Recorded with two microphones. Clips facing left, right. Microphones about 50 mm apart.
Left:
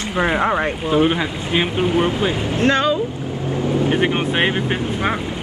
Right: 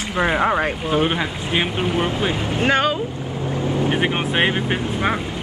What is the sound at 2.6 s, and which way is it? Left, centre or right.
Speech, centre.